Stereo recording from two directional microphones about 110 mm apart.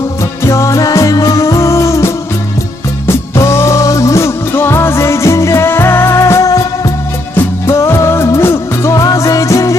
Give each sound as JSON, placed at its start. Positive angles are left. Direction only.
{"t": 0.5, "sound": "music", "side_deg": 30}